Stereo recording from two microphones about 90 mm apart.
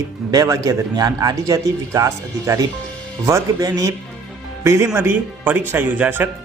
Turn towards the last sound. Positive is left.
turn(degrees=-20)  # may be behind; listen again after turning